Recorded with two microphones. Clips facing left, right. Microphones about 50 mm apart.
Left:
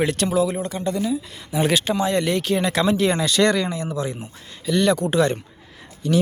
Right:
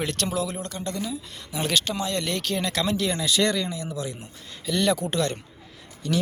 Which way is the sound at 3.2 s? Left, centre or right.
Left.